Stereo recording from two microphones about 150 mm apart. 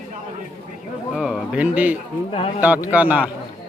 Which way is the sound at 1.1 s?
5° right (ahead or behind).